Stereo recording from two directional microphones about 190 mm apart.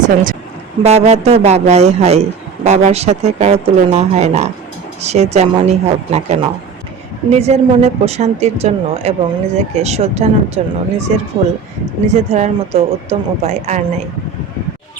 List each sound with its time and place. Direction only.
0.8 s speech: 35° right (ahead or behind)